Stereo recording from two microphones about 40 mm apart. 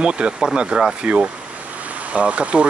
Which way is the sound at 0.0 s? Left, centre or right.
Right.